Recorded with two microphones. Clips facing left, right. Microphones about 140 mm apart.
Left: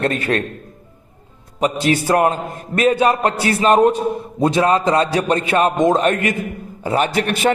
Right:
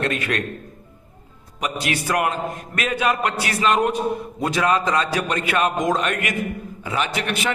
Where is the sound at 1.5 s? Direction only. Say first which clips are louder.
Left 8 dB; 30° left (ahead or behind).